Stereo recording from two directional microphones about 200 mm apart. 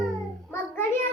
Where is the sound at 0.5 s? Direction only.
10° left (ahead or behind).